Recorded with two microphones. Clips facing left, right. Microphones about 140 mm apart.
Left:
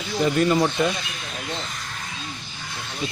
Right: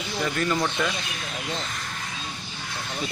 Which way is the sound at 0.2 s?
20° left (ahead or behind).